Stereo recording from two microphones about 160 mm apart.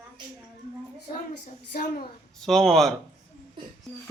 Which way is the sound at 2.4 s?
Centre (ahead or behind).